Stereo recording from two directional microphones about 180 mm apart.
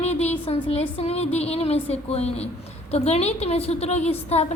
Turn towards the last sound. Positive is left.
turn(degrees=35)  # may be behind; listen again after turning